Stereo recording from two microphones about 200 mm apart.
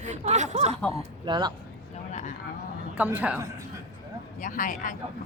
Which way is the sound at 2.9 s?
10° right (ahead or behind).